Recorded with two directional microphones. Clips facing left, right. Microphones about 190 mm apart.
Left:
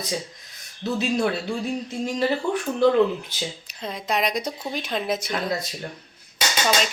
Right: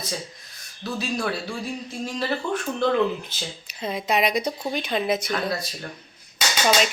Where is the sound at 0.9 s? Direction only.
20° left (ahead or behind).